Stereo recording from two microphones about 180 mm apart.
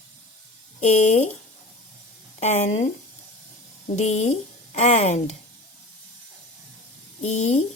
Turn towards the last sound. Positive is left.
turn(degrees=40)  # may be behind; listen again after turning